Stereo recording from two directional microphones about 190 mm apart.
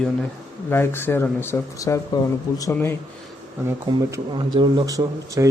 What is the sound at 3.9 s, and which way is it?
Speech, 20° right (ahead or behind).